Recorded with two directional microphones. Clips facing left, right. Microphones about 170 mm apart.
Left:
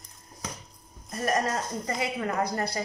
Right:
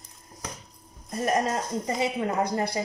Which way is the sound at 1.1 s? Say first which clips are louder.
Right 2 dB; 20° right (ahead or behind).